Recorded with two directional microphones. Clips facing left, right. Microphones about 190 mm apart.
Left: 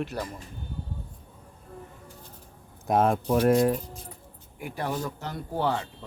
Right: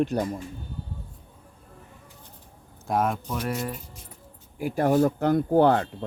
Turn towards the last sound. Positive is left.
turn(degrees=-55)  # may be behind; listen again after turning